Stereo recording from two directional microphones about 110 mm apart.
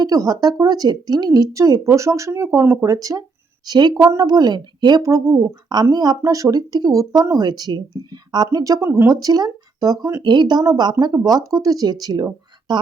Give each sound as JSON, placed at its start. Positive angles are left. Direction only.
{"t": 0.0, "sound": "speech", "side_deg": -35}
{"t": 5.3, "sound": "speech", "side_deg": -20}
{"t": 5.6, "sound": "speech", "side_deg": -40}
{"t": 10.2, "sound": "speech", "side_deg": -40}